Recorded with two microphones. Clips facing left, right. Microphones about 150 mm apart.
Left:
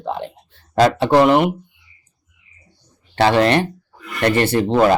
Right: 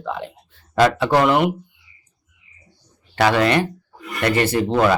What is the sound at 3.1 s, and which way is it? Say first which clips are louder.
Speech: left 2 dB; 30° left (ahead or behind).